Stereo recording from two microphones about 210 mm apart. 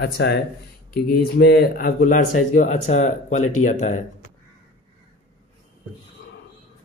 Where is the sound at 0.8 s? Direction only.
45° left (ahead or behind).